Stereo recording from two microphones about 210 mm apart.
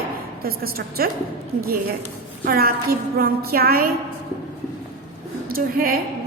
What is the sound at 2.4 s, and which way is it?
A woman's voice, 45° right (ahead or behind).